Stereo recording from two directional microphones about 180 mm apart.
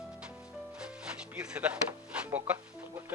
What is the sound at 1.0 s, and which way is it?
Speech, 5° right (ahead or behind).